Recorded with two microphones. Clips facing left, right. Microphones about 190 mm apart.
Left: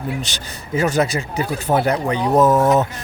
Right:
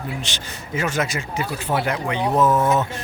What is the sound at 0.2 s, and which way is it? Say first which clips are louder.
Speech: left 2 dB; 40° left (ahead or behind).